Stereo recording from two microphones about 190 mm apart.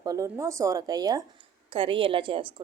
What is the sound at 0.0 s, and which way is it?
A woman's voice, 20° right (ahead or behind).